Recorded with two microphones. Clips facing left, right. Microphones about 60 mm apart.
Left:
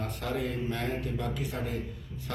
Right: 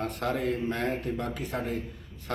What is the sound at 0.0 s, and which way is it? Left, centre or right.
A man's voice, right.